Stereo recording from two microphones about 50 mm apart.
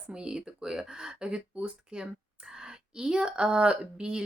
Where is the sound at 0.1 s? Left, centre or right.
Centre.